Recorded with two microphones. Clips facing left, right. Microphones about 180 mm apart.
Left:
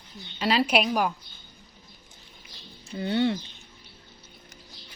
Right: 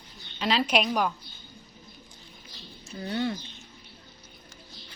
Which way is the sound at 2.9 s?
30° left (ahead or behind).